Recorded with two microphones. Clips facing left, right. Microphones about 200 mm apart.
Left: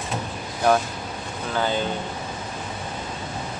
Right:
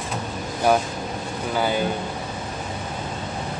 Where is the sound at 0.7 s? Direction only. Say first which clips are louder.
Even; 10° right (ahead or behind).